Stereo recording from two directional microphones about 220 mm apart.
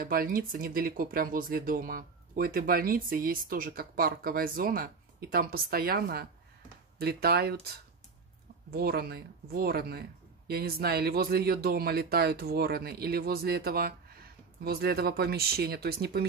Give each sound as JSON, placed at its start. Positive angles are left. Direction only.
{"t": 0.0, "sound": "speech", "side_deg": -40}
{"t": 8.7, "sound": "speech", "side_deg": -45}